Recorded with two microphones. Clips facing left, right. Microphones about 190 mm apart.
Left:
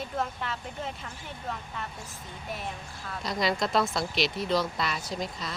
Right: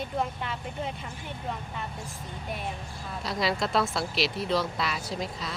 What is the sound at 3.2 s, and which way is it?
Speech, 5° right (ahead or behind).